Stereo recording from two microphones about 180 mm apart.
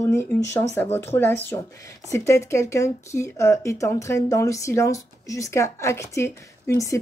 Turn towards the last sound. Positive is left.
turn(degrees=15)  # may be behind; listen again after turning